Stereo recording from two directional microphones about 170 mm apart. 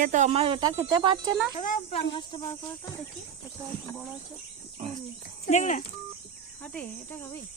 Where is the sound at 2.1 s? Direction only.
25° left (ahead or behind).